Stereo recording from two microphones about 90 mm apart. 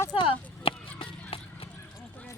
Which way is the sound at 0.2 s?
85° left.